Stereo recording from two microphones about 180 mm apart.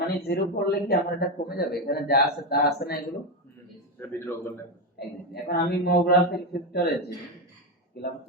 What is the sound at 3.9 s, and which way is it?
Speech, 10° left (ahead or behind).